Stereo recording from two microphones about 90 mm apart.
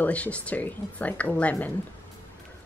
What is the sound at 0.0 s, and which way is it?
Speech, 15° left (ahead or behind).